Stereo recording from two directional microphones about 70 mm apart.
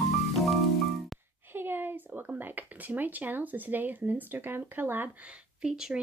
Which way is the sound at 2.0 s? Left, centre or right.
Right.